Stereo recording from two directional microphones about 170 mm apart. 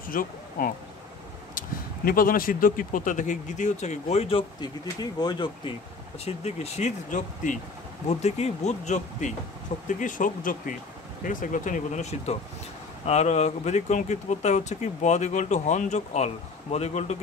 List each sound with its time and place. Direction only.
0.1 s speech: 55° left (ahead or behind)
2.0 s speech: 55° left (ahead or behind); by 5.8 s 25° left (ahead or behind)
6.2 s speech: 40° left (ahead or behind)